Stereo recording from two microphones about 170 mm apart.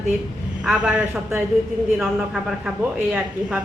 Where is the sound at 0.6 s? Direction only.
5° right (ahead or behind).